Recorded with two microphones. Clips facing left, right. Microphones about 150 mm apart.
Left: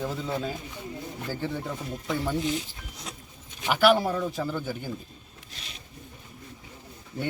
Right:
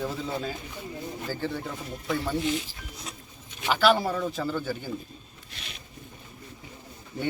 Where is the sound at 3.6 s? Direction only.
15° left (ahead or behind).